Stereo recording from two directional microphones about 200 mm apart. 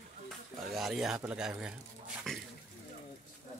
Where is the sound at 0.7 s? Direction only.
Centre (ahead or behind).